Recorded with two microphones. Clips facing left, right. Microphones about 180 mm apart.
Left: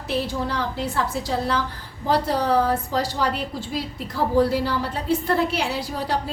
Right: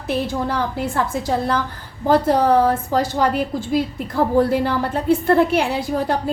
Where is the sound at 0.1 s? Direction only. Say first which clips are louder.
Right 4 dB; 50° right (ahead or behind).